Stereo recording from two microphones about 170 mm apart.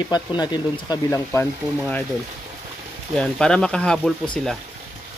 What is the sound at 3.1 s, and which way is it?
Speech, 5° left (ahead or behind).